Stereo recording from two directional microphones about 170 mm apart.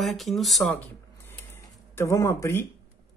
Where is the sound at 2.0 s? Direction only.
15° left (ahead or behind).